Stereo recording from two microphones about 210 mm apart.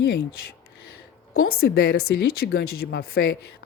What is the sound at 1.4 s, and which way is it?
A woman's voice, 45° left (ahead or behind).